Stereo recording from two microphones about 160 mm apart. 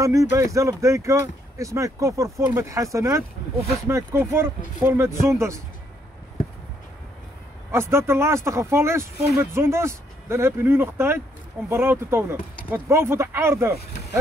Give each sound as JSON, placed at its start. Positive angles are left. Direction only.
{"t": 0.0, "sound": "speech", "side_deg": -20}
{"t": 7.7, "sound": "speech", "side_deg": -15}